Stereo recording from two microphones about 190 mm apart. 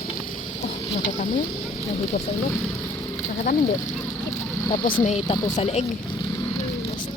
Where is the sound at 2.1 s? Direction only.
45° left (ahead or behind).